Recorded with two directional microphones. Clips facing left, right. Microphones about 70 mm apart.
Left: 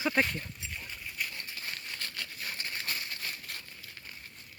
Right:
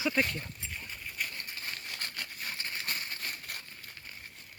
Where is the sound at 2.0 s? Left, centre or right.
Right.